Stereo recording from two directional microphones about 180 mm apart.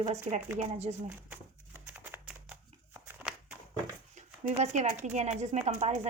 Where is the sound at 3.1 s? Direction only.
10° right (ahead or behind).